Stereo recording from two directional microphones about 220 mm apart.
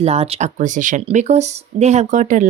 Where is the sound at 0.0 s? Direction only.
30° right (ahead or behind).